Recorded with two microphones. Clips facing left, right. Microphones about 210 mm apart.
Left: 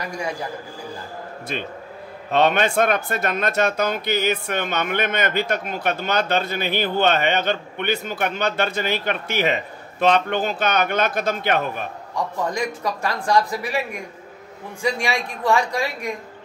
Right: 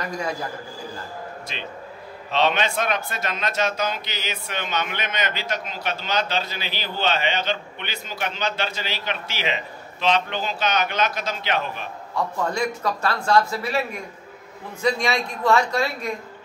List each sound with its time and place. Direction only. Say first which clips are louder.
1.5 s speech: left 5 dB; 50° left (ahead or behind)
12.2 s a man's voice: even; 15° left (ahead or behind)